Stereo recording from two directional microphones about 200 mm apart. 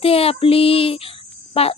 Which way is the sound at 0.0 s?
30° left (ahead or behind).